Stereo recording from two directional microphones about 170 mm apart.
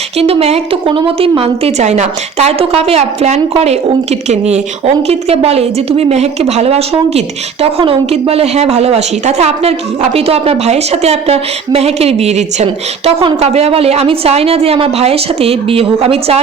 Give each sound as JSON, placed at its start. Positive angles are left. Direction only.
{"t": 0.2, "sound": "a woman's voice", "side_deg": -35}